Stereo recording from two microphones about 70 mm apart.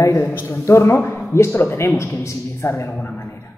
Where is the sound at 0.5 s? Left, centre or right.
Left.